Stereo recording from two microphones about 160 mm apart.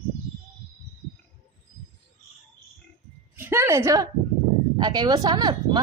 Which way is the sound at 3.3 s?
15° right (ahead or behind).